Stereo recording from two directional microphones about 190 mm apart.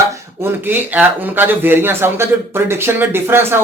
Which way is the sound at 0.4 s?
10° right (ahead or behind).